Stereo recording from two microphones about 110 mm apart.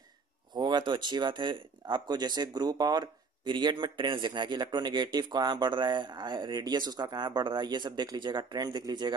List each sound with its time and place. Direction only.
0.6 s speech: 45° right (ahead or behind)